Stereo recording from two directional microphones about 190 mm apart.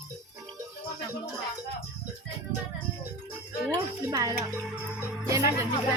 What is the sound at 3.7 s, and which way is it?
Speech, 20° right (ahead or behind).